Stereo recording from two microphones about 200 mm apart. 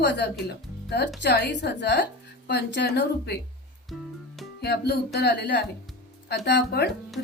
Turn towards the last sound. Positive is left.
turn(degrees=55)  # may be behind; listen again after turning